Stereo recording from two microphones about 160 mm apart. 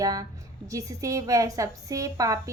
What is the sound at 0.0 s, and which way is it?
A woman's voice, 20° right (ahead or behind).